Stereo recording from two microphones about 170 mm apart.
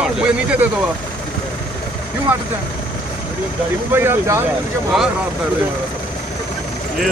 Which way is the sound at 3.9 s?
15° right (ahead or behind).